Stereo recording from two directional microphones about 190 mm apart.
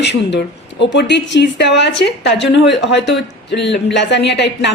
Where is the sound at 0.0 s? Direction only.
65° left (ahead or behind).